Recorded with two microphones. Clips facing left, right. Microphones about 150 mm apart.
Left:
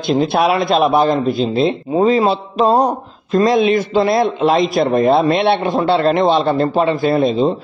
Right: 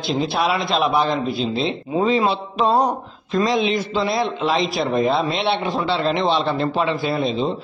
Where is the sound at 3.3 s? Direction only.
50° left (ahead or behind).